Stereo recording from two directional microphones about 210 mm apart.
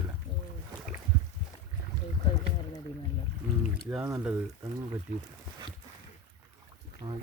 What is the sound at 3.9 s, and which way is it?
Speech, 15° right (ahead or behind).